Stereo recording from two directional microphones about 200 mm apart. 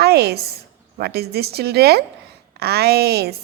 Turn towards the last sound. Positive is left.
turn(degrees=-55)  # may be behind; listen again after turning